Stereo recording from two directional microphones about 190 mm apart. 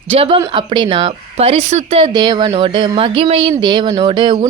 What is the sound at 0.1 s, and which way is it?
A woman's voice, 30° right (ahead or behind).